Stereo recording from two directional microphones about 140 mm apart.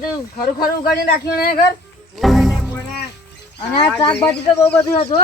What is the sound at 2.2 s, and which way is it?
Music, centre (ahead or behind).